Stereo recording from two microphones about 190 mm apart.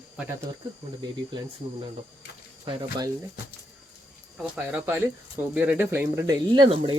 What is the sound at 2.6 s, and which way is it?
Speech, 25° right (ahead or behind).